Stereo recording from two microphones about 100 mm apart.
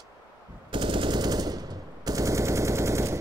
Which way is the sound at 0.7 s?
55° right (ahead or behind).